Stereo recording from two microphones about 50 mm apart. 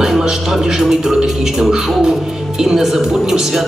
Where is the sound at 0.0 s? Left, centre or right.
Centre.